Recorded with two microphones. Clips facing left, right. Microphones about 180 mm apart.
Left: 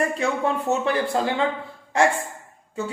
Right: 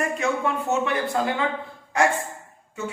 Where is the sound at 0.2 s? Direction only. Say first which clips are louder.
Right 3 dB; 35° left (ahead or behind).